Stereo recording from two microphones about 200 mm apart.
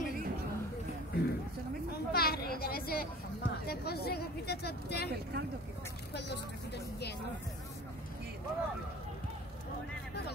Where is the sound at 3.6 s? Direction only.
50° left (ahead or behind).